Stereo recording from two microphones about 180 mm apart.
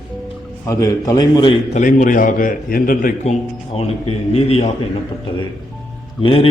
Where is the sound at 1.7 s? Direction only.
45° left (ahead or behind).